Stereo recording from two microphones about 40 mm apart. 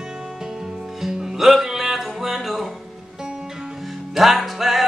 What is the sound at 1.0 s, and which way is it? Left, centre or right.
Music, centre.